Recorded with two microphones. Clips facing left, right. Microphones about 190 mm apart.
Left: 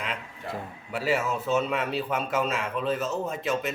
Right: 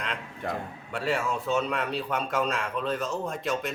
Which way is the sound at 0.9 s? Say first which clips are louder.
Left 2 dB; 5° left (ahead or behind).